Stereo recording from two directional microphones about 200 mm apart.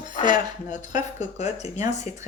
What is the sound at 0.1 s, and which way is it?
Speech, 40° left (ahead or behind).